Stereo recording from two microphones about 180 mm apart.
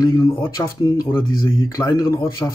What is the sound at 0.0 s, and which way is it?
Speech, 15° left (ahead or behind).